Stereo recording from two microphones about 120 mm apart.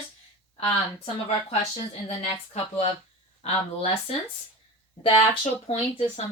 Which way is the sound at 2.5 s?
60° left (ahead or behind).